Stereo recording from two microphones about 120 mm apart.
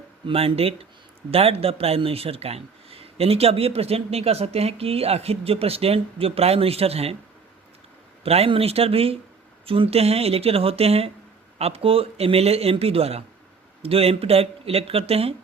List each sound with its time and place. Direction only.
0.3 s speech: 55° right (ahead or behind)
8.2 s speech: 55° right (ahead or behind)